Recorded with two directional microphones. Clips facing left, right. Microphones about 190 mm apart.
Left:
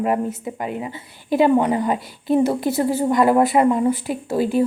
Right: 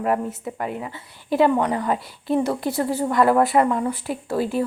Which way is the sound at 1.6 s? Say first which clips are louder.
Left 3 dB; 20° left (ahead or behind).